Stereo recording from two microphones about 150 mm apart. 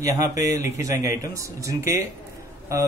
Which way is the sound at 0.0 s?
20° right (ahead or behind).